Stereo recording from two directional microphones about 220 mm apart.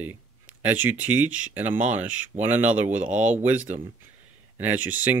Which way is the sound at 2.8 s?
35° right (ahead or behind).